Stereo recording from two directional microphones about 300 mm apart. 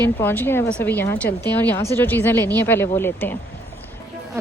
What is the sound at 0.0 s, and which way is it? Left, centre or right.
Speech, centre.